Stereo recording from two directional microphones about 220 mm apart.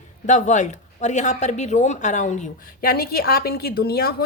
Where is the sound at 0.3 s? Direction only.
35° left (ahead or behind).